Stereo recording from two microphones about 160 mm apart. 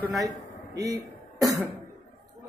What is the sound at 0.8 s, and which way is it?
Speech, 25° right (ahead or behind).